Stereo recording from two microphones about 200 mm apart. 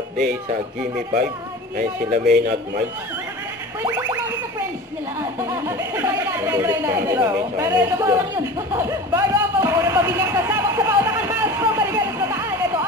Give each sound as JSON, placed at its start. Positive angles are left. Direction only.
{"t": 1.8, "sound": "speech", "side_deg": -50}
{"t": 3.8, "sound": "boing", "side_deg": -15}
{"t": 5.4, "sound": "speech", "side_deg": -10}